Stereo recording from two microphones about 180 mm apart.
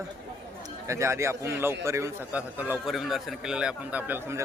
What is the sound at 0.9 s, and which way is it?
A man's voice, 15° right (ahead or behind).